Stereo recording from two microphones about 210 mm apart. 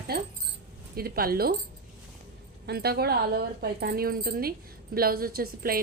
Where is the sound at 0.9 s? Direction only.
45° right (ahead or behind).